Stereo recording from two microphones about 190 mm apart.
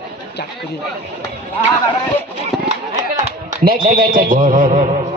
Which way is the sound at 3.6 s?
50° right (ahead or behind).